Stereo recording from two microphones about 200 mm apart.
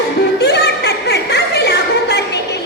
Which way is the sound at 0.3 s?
55° left (ahead or behind).